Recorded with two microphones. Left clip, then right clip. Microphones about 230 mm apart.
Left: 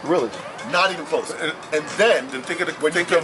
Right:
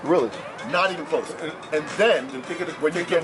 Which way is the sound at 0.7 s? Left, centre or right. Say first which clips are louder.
Left 2 dB; centre.